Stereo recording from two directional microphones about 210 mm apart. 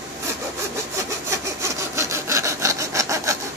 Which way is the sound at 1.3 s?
15° right (ahead or behind).